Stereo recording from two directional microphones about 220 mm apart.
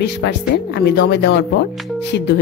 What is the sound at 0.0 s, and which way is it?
Speech, 50° left (ahead or behind).